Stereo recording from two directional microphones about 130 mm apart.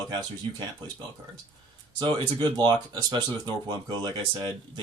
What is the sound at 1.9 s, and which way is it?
Speech, 35° right (ahead or behind).